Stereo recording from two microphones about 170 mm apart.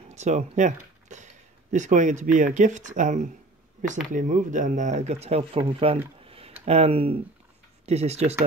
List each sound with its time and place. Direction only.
0.1 s speech: 40° right (ahead or behind)
6.2 s typing: 35° right (ahead or behind)
6.6 s speech: 35° right (ahead or behind)